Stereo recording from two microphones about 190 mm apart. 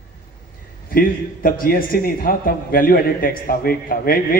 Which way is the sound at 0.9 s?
50° left (ahead or behind).